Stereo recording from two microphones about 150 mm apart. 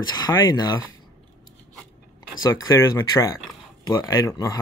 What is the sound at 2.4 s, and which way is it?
Speech, 20° left (ahead or behind).